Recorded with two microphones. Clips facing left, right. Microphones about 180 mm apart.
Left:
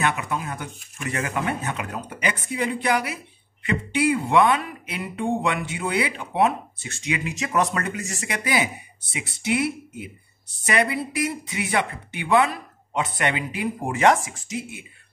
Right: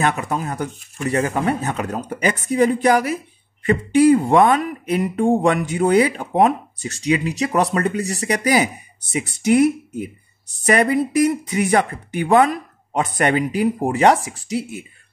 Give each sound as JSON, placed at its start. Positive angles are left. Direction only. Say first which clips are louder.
{"t": 0.0, "sound": "speech", "louder": "right 4 dB", "side_deg": -40}